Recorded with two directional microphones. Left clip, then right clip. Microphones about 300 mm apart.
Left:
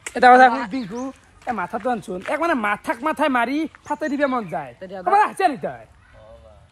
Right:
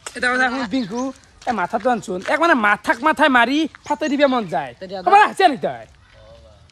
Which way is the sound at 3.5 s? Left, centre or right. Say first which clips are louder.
Right 4 dB; right.